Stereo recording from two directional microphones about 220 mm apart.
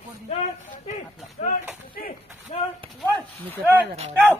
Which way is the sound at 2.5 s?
30° left (ahead or behind).